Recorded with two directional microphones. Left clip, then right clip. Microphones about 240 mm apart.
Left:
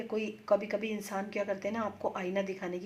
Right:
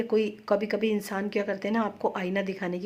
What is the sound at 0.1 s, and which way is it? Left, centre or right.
Speech, right.